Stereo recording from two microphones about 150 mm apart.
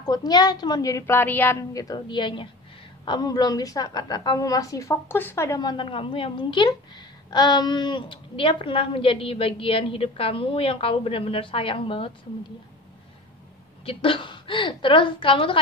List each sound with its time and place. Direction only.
0.0 s a woman's voice: 25° left (ahead or behind)
13.8 s a woman's voice: 35° left (ahead or behind)